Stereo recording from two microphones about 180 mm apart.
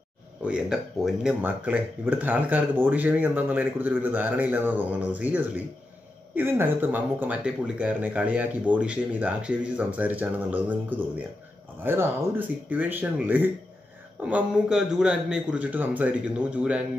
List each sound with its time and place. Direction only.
0.5 s speech: 5° right (ahead or behind)